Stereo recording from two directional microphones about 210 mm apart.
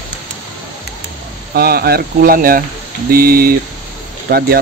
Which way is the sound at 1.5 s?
45° right (ahead or behind).